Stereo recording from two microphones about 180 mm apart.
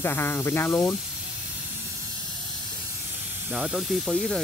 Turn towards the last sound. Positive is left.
turn(degrees=0)  # may be behind; listen again after turning